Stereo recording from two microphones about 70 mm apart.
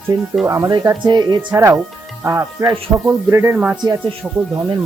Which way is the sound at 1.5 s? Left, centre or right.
Right.